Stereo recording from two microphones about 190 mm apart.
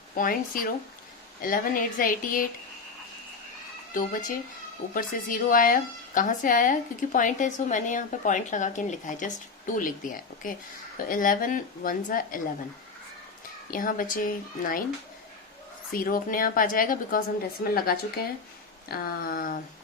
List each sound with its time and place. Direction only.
0.1 s a woman's voice: 45° left (ahead or behind)
3.9 s a woman's voice: 45° left (ahead or behind)
13.7 s a woman's voice: 45° left (ahead or behind)
15.9 s a woman's voice: 45° left (ahead or behind)